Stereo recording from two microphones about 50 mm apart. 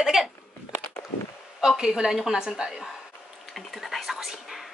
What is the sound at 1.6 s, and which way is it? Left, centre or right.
A woman's voice, centre.